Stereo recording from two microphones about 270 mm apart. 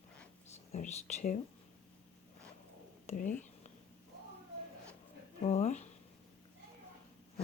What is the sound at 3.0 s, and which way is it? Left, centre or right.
Speech, left.